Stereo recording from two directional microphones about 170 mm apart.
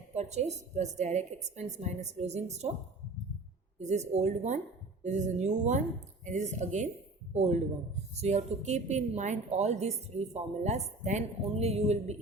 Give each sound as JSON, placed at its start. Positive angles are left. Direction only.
{"t": 0.1, "sound": "a woman's voice", "side_deg": -40}
{"t": 3.8, "sound": "a woman's voice", "side_deg": -40}